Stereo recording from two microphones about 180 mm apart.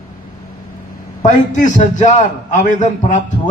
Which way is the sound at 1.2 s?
45° left (ahead or behind).